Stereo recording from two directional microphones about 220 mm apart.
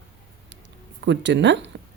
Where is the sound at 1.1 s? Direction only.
55° right (ahead or behind).